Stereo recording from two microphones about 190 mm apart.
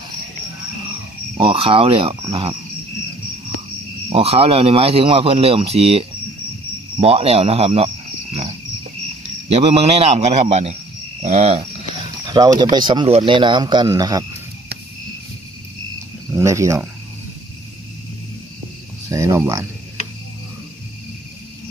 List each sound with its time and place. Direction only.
1.4 s speech: 30° right (ahead or behind)
4.1 s speech: 30° right (ahead or behind)
12.3 s speech: 20° right (ahead or behind)
16.3 s speech: 15° right (ahead or behind)
19.0 s speech: 15° right (ahead or behind)